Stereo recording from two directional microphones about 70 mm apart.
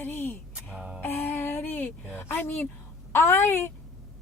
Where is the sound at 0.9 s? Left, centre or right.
Left.